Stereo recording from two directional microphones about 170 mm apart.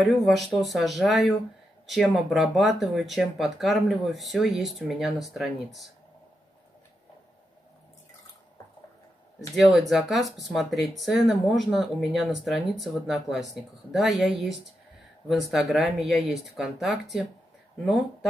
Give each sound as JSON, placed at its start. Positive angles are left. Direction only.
{"t": 0.0, "sound": "speech", "side_deg": 0}
{"t": 9.6, "sound": "speech", "side_deg": 0}